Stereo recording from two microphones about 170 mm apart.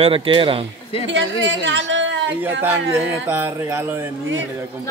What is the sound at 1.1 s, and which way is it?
A woman's voice, 90° right.